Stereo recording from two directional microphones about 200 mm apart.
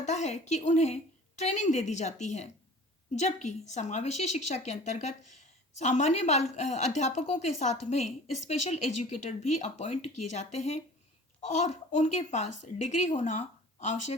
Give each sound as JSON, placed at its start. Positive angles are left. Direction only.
{"t": 0.0, "sound": "a woman's voice", "side_deg": 35}